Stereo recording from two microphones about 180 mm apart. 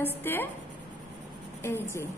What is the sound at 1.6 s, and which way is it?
Speech, 15° left (ahead or behind).